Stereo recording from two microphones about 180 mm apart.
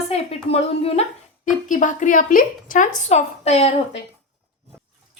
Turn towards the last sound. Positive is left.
turn(degrees=35)  # may be behind; listen again after turning